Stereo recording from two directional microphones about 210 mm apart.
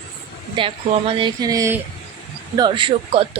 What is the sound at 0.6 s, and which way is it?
Speech, 25° right (ahead or behind).